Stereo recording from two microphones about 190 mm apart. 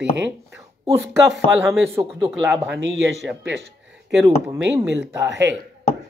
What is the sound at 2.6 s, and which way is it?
Speech, 70° right (ahead or behind).